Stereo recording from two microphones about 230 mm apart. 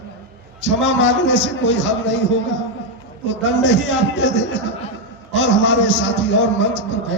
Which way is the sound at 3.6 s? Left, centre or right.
Left.